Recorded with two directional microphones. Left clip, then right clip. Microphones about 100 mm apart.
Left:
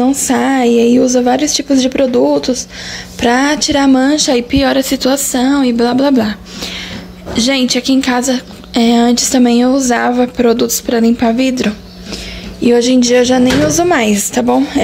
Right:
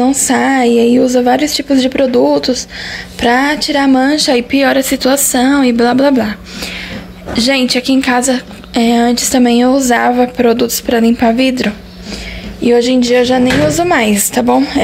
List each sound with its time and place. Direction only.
0.0 s a woman's voice: 20° left (ahead or behind)
3.2 s a sound: 30° left (ahead or behind)
3.6 s a woman's voice: 30° left (ahead or behind); by 6.1 s 15° left (ahead or behind)
6.1 s a woman's voice: 30° left (ahead or behind)
12.6 s a sound: 35° left (ahead or behind)
13.7 s a woman's voice: 20° left (ahead or behind)